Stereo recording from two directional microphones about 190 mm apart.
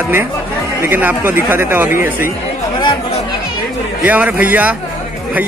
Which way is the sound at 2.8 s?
25° left (ahead or behind).